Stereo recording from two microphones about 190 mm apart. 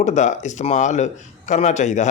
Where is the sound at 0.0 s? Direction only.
40° left (ahead or behind).